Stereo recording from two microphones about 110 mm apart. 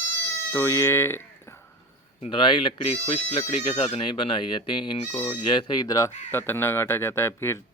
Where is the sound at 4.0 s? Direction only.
45° left (ahead or behind).